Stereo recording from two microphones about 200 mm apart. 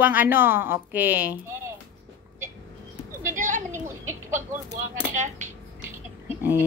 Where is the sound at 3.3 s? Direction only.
40° right (ahead or behind).